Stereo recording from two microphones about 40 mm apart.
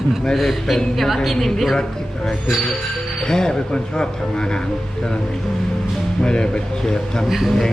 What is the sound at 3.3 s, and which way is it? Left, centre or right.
Speech, centre.